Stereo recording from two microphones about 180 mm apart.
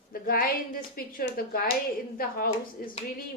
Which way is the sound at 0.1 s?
55° left (ahead or behind).